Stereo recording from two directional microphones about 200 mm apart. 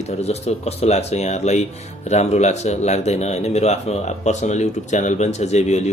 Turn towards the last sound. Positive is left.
turn(degrees=35)  # may be behind; listen again after turning